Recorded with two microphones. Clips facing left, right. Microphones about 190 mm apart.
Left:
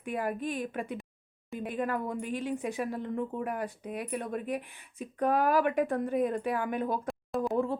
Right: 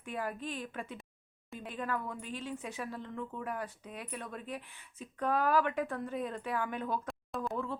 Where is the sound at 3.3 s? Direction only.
15° left (ahead or behind).